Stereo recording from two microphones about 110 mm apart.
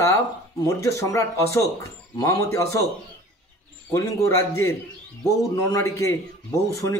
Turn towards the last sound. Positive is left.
turn(degrees=30)  # may be behind; listen again after turning